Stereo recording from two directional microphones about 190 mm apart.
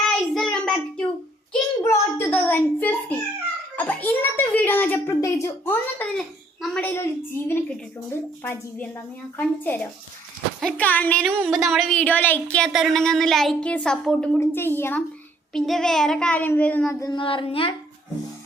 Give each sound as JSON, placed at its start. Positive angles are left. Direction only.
{"t": 0.0, "sound": "child singing", "side_deg": 0}
{"t": 1.8, "sound": "a sound", "side_deg": 10}
{"t": 3.8, "sound": "a child's voice", "side_deg": 10}
{"t": 9.4, "sound": "a child's voice", "side_deg": 10}
{"t": 17.1, "sound": "speech", "side_deg": 25}